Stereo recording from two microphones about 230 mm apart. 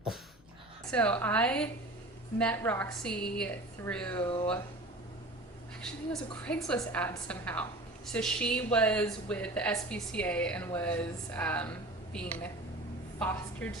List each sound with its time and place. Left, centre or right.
0.9 s a woman's voice: centre
4.2 s speech: left
6.1 s a woman's voice: centre